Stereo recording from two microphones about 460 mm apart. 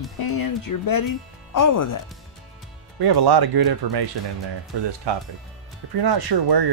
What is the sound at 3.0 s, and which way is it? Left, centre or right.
Speech, right.